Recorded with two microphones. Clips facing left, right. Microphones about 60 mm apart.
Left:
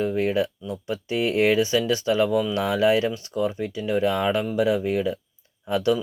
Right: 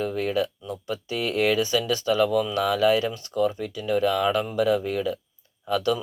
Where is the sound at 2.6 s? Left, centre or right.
Left.